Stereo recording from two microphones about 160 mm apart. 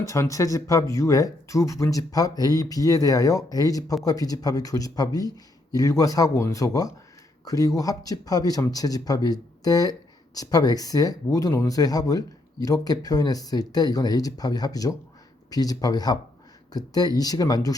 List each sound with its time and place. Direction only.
0.0 s speech: 20° left (ahead or behind)